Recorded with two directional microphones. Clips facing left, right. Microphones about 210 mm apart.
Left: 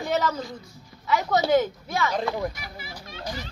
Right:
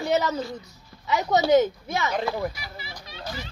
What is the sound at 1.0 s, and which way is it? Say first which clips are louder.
A woman's voice: right 1 dB; 20° right (ahead or behind).